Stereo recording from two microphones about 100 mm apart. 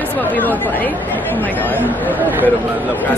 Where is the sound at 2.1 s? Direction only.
20° right (ahead or behind).